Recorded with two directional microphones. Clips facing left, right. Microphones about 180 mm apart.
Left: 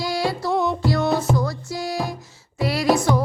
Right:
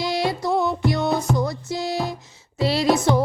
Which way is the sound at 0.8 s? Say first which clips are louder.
Left 1 dB; 20° right (ahead or behind).